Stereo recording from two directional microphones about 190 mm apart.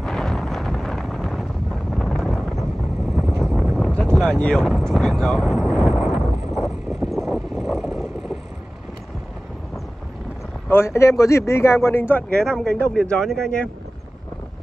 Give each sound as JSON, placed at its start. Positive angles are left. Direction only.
{"t": 0.0, "sound": "wind noise", "side_deg": 0}
{"t": 3.2, "sound": "a sound", "side_deg": 0}
{"t": 10.7, "sound": "speech", "side_deg": 15}